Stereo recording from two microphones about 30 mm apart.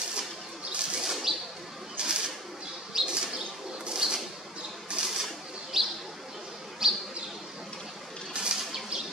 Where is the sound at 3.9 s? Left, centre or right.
Centre.